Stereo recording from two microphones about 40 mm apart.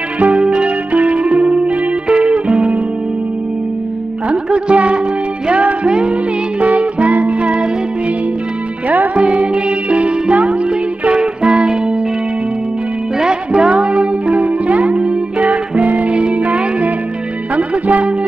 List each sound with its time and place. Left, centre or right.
0.2 s music: right
4.3 s music: right
5.9 s music: right
6.6 s music: right
8.8 s music: right
9.1 s music: right
13.2 s music: centre
14.3 s music: right